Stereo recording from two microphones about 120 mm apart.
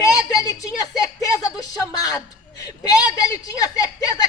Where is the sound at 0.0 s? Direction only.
30° left (ahead or behind).